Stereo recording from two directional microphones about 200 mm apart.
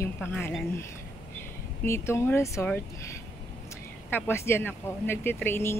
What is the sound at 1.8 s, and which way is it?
Speech, 15° left (ahead or behind).